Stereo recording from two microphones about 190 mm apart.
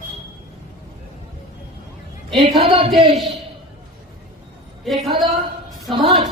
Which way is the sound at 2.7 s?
30° right (ahead or behind).